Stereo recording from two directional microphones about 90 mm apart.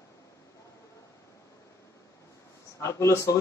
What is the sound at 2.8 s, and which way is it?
Speech, 35° left (ahead or behind).